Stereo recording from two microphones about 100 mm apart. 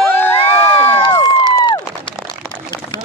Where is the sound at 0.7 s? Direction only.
25° left (ahead or behind).